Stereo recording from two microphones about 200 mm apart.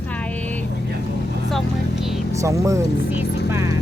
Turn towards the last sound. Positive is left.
turn(degrees=-15)  # may be behind; listen again after turning